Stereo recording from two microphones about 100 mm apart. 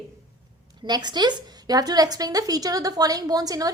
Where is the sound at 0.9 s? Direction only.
45° right (ahead or behind).